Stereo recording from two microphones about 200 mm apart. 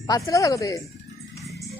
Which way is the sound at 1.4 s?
Centre (ahead or behind).